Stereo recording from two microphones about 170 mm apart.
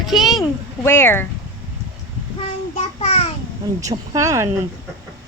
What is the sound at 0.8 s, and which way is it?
Speech, 15° left (ahead or behind).